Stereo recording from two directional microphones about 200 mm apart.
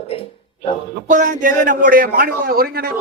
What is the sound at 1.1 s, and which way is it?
A man's voice, 40° right (ahead or behind).